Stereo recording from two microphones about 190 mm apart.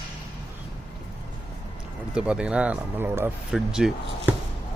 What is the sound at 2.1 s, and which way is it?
Speech, 5° right (ahead or behind).